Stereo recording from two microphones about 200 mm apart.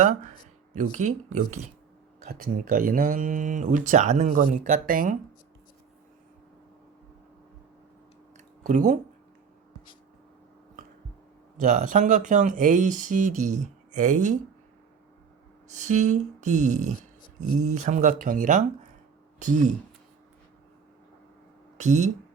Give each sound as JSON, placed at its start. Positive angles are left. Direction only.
{"t": 0.0, "sound": "speech", "side_deg": -35}
{"t": 8.6, "sound": "speech", "side_deg": -40}
{"t": 11.6, "sound": "speech", "side_deg": -40}
{"t": 15.7, "sound": "speech", "side_deg": -35}
{"t": 21.8, "sound": "speech", "side_deg": -35}